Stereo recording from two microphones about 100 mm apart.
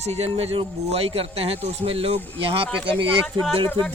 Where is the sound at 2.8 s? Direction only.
60° right (ahead or behind).